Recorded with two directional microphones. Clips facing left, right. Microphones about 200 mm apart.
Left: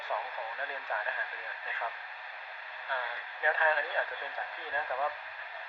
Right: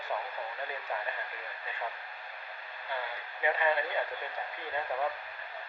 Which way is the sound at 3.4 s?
10° right (ahead or behind).